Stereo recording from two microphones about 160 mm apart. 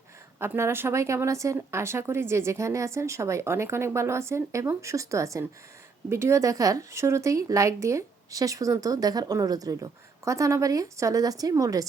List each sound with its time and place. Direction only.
0.3 s a woman's voice: 15° right (ahead or behind)